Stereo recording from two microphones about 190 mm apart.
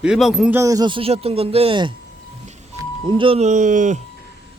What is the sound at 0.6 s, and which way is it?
Speech, 20° right (ahead or behind).